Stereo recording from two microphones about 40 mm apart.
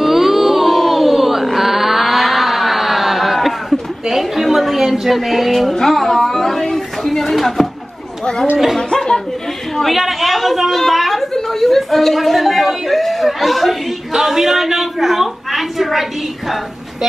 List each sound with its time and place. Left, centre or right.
0.0 s a sound: centre
4.8 s a woman's voice: centre
8.7 s chatter: centre
9.8 s a woman's voice: centre